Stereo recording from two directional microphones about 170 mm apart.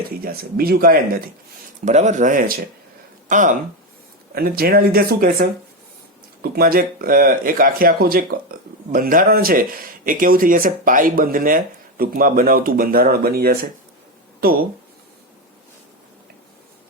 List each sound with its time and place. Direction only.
0.2 s speech: 60° right (ahead or behind)
1.8 s speech: 45° right (ahead or behind)
4.4 s speech: 60° right (ahead or behind)